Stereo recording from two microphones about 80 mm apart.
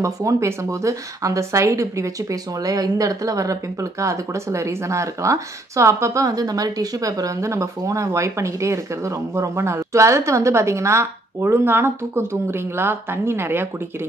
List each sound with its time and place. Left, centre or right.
0.0 s speech: right